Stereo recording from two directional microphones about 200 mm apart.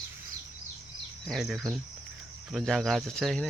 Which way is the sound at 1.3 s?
Centre (ahead or behind).